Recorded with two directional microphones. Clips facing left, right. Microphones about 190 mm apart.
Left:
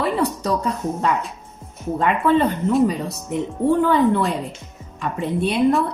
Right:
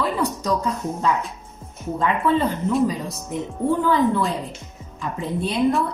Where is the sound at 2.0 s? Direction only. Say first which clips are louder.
Left 3 dB; 65° left (ahead or behind).